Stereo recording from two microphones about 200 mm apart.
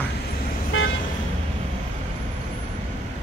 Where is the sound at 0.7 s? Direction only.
90° left.